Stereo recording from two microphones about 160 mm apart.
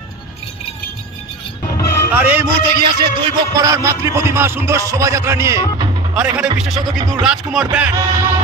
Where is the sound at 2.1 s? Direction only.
10° right (ahead or behind).